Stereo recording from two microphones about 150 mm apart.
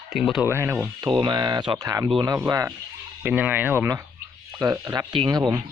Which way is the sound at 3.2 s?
10° right (ahead or behind).